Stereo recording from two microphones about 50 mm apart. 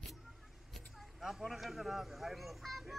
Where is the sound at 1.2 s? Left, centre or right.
Centre.